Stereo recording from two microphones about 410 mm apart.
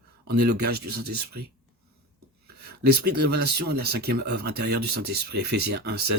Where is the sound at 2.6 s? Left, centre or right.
Right.